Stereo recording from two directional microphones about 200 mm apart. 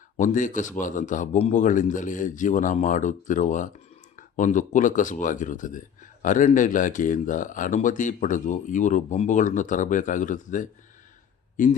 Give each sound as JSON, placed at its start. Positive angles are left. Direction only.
{"t": 0.2, "sound": "speech", "side_deg": 40}